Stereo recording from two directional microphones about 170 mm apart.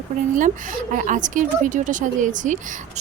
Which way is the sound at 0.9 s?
50° right (ahead or behind).